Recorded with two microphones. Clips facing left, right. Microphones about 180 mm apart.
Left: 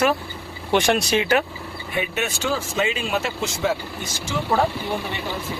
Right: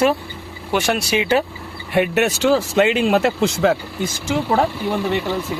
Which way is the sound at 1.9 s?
70° right (ahead or behind).